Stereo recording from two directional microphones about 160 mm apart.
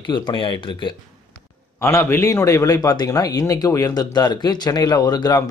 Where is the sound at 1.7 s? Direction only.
15° left (ahead or behind).